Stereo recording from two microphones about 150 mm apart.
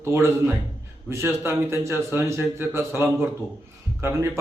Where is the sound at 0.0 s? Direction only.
15° right (ahead or behind).